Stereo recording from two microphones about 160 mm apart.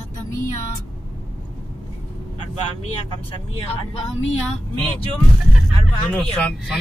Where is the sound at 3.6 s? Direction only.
40° left (ahead or behind).